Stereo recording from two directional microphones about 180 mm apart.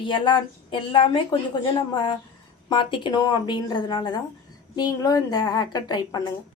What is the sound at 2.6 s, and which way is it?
A woman's voice, 25° left (ahead or behind).